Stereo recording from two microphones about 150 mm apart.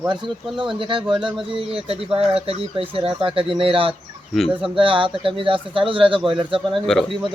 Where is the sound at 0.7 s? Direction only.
35° right (ahead or behind).